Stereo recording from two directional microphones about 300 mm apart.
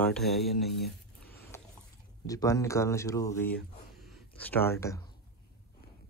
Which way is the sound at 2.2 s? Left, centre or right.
Centre.